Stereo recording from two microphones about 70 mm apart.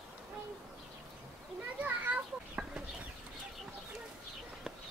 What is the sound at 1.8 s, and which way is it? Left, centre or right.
Children playing, centre.